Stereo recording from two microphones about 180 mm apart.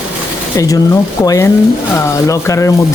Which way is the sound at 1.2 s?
20° left (ahead or behind).